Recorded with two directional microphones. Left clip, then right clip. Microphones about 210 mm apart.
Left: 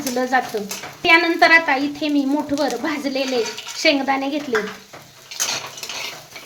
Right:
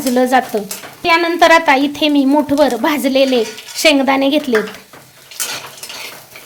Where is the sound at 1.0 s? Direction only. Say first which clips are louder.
Right 2 dB; 35° right (ahead or behind).